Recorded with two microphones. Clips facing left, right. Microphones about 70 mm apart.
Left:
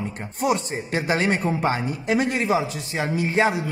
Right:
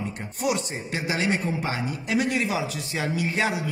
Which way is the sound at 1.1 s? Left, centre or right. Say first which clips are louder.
Left 3 dB; left.